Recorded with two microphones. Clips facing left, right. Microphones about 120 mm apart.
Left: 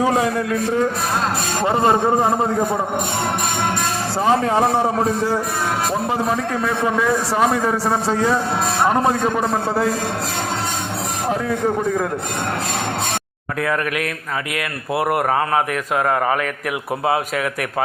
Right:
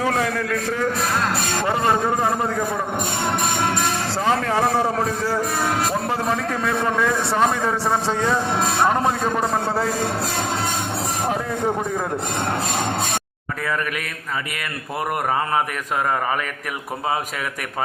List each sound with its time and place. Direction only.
0.0 s a man's voice: 15° left (ahead or behind)
4.3 s a man's voice: 20° left (ahead or behind); by 9.9 s centre (ahead or behind)